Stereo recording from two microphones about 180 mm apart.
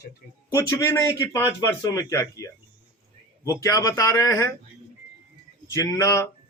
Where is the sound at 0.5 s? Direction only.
15° left (ahead or behind).